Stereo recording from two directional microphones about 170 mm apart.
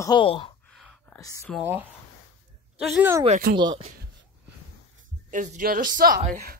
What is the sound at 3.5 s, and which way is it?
Speech, 25° right (ahead or behind).